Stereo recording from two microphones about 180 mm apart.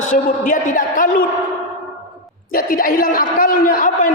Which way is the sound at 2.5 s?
50° left (ahead or behind).